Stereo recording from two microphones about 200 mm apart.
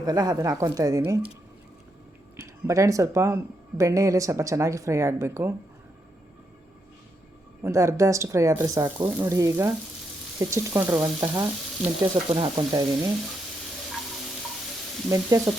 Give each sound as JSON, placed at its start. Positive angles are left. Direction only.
{"t": 0.0, "sound": "speech", "side_deg": -20}
{"t": 2.3, "sound": "speech", "side_deg": -15}
{"t": 7.6, "sound": "speech", "side_deg": -15}
{"t": 12.3, "sound": "stir", "side_deg": -25}
{"t": 15.1, "sound": "speech", "side_deg": -15}